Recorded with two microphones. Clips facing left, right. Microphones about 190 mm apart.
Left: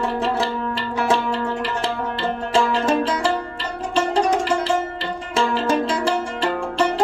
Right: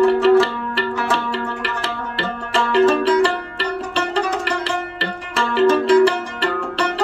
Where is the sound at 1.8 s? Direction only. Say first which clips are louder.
Left 2 dB; 65° right (ahead or behind).